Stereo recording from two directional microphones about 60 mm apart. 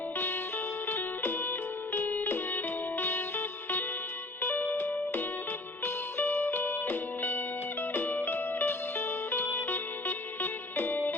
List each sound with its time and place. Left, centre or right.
0.9 s music: left